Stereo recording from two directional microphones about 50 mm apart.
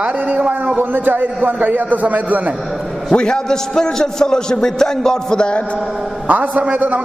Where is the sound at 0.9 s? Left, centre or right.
Right.